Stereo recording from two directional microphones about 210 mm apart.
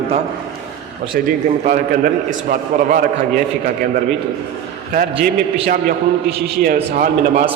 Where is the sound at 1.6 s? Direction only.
40° right (ahead or behind).